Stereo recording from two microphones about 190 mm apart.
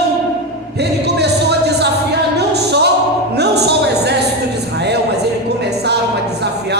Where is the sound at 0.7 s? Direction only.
60° right (ahead or behind).